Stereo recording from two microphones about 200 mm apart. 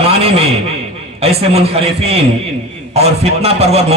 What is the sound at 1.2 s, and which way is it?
A man's voice, 30° right (ahead or behind).